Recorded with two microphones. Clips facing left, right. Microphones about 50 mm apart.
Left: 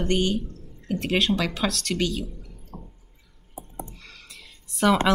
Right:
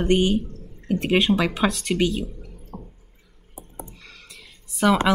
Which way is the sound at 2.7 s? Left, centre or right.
Right.